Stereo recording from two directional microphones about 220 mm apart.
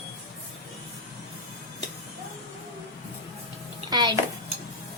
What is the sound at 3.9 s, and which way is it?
Speech, 20° right (ahead or behind).